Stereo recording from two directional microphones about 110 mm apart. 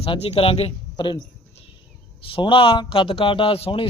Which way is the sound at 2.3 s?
50° left (ahead or behind).